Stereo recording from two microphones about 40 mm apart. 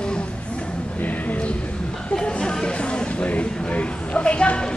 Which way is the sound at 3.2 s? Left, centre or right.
Left.